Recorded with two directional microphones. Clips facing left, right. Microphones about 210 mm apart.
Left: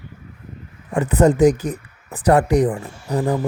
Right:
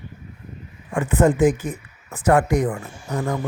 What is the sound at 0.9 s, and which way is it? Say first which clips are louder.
Speech: left 2 dB; 40° left (ahead or behind).